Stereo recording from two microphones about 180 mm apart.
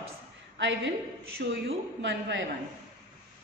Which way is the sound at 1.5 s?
80° right.